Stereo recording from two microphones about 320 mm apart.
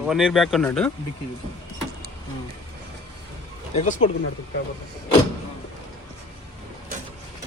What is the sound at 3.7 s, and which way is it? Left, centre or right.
Speech, left.